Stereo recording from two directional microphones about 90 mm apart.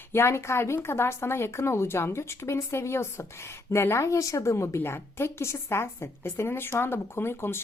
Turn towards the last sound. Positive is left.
turn(degrees=25)  # may be behind; listen again after turning